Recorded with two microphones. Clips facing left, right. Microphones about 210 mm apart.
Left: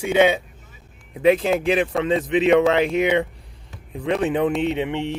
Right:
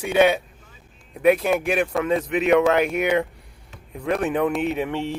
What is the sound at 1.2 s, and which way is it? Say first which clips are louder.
Speech: left 1 dB; 30° left (ahead or behind).